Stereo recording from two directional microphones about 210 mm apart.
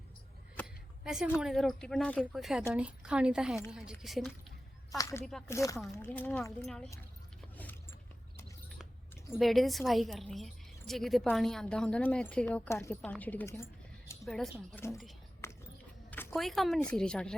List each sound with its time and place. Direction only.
1.0 s a woman's voice: centre (ahead or behind)
4.9 s speech: 15° left (ahead or behind)
7.5 s a sound: 10° left (ahead or behind)
9.4 s a woman's voice: centre (ahead or behind)
14.3 s a woman's voice: centre (ahead or behind)
15.4 s biting: 15° left (ahead or behind)
16.0 s a woman's voice: 10° left (ahead or behind)